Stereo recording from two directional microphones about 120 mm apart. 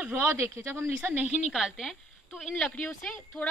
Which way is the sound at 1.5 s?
Centre (ahead or behind).